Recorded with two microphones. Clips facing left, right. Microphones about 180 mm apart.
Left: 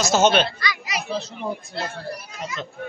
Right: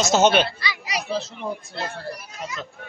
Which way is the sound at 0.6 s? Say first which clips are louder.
Left 1 dB; 30° right (ahead or behind).